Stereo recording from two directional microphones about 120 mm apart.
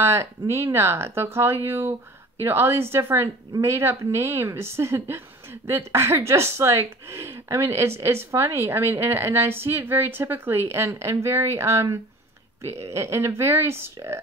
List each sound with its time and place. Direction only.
0.0 s a woman's voice: 20° right (ahead or behind)